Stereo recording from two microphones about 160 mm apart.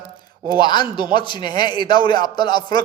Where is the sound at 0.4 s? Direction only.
25° left (ahead or behind).